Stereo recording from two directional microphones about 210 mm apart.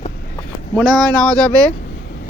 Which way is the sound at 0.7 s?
5° left (ahead or behind).